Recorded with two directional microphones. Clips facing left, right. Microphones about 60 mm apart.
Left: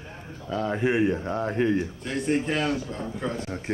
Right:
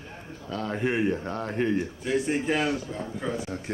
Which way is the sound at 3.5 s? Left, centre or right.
Left.